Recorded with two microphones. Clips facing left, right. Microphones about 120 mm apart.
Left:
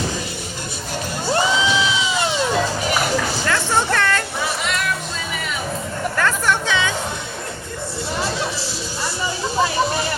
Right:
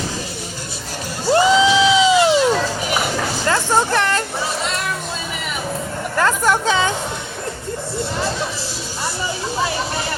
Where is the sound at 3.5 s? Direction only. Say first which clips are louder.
Right 4 dB; 25° right (ahead or behind).